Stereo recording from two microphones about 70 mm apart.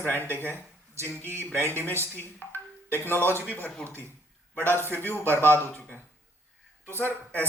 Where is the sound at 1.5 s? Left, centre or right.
Right.